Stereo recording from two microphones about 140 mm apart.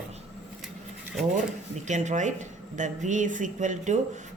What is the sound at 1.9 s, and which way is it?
Speech, 60° right (ahead or behind).